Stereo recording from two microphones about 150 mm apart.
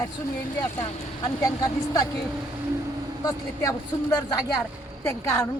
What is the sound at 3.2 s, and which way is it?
Speech, 25° left (ahead or behind).